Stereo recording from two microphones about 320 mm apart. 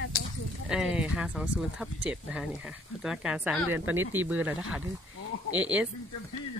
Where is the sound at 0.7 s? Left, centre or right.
Centre.